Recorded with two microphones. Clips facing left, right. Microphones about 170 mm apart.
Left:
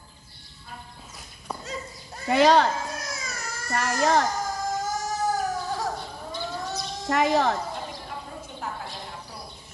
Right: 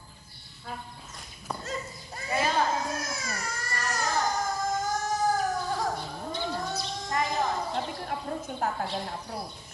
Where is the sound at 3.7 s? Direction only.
85° left.